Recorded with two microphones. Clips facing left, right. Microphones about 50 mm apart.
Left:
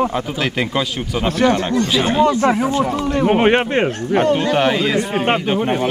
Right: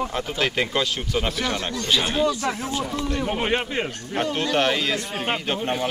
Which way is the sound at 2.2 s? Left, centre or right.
Left.